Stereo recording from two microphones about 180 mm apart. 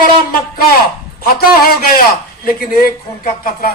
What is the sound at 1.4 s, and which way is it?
A man's voice, 55° left (ahead or behind).